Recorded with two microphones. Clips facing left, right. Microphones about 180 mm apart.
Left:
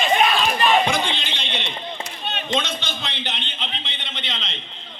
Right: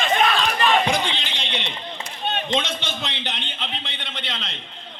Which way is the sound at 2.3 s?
50° right (ahead or behind).